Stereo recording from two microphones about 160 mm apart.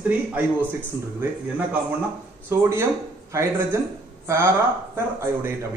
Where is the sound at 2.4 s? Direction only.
15° right (ahead or behind).